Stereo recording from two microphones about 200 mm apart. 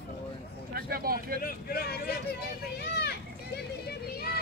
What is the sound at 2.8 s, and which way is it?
Children playing, 55° left (ahead or behind).